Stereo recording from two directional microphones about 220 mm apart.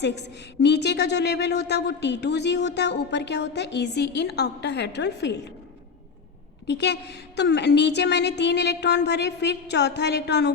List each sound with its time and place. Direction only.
0.0 s a woman's voice: 50° left (ahead or behind)
6.7 s a woman's voice: 50° left (ahead or behind)